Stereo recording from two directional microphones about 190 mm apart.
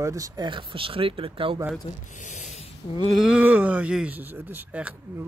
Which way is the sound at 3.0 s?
Centre (ahead or behind).